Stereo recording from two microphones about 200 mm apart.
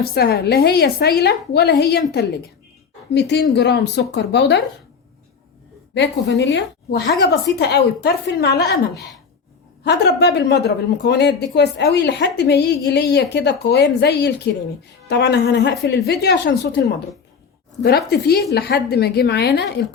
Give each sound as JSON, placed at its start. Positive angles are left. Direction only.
{"t": 0.0, "sound": "a woman's voice", "side_deg": 50}
{"t": 5.9, "sound": "a woman's voice", "side_deg": 60}